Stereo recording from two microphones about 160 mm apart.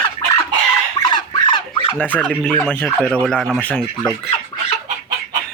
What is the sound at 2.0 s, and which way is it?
Speech, 10° left (ahead or behind).